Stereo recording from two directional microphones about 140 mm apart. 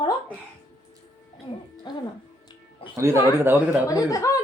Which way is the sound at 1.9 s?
30° left (ahead or behind).